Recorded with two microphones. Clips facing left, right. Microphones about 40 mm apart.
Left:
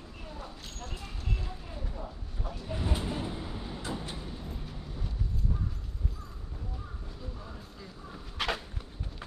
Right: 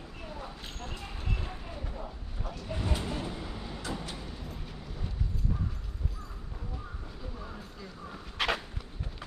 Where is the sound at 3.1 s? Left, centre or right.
Centre.